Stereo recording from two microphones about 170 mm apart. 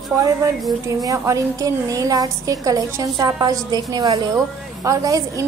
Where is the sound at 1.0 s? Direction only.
20° right (ahead or behind).